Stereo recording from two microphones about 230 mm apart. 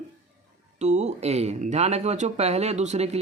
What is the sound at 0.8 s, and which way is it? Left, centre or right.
Speech, right.